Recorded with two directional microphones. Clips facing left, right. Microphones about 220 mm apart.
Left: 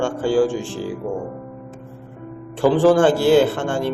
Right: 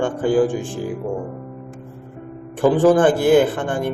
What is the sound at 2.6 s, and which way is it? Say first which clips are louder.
Speech: even; 15° right (ahead or behind).